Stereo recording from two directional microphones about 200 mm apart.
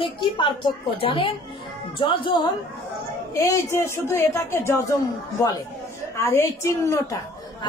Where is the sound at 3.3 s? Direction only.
15° left (ahead or behind).